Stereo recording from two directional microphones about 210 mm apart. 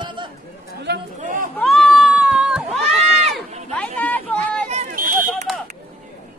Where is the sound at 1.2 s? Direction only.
40° right (ahead or behind).